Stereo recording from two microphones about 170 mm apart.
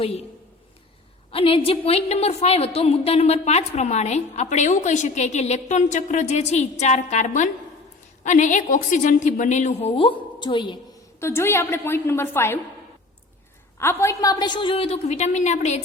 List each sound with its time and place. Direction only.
1.3 s a woman's voice: 35° left (ahead or behind)
11.2 s a woman's voice: 15° left (ahead or behind)
13.7 s a woman's voice: 15° left (ahead or behind); by 15.8 s 40° left (ahead or behind)